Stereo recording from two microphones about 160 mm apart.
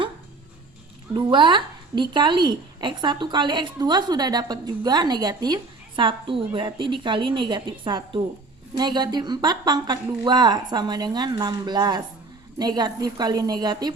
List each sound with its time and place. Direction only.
1.1 s a woman's voice: 30° right (ahead or behind)